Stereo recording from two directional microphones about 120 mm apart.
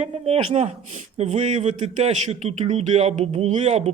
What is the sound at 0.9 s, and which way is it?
A man's voice, 70° right (ahead or behind).